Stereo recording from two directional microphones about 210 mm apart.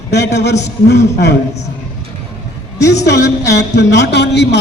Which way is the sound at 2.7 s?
55° left (ahead or behind).